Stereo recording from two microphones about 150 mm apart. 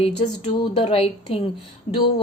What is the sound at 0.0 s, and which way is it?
A woman's voice, 45° left (ahead or behind).